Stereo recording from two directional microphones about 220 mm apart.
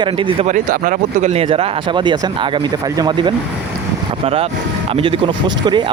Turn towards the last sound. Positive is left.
turn(degrees=-20)  # may be behind; listen again after turning